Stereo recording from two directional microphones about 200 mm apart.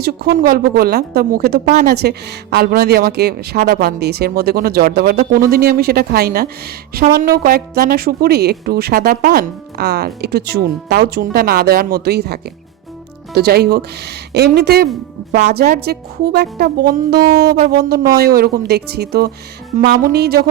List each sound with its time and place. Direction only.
0.0 s a woman's voice: 50° right (ahead or behind)
17.9 s a woman's voice: 15° right (ahead or behind)
18.3 s a woman's voice: 50° right (ahead or behind)